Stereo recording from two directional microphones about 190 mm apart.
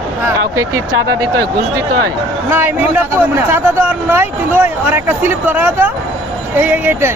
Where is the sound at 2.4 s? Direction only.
10° right (ahead or behind).